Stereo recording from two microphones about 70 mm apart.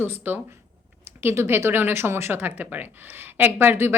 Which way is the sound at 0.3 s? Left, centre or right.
Right.